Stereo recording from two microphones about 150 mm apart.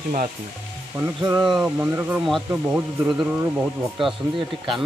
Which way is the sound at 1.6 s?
15° right (ahead or behind).